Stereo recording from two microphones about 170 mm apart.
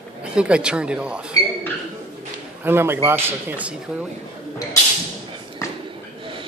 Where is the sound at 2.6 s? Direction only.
15° right (ahead or behind).